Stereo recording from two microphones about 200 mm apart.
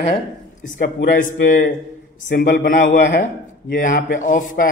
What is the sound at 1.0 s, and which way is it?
A man's voice, 45° left (ahead or behind).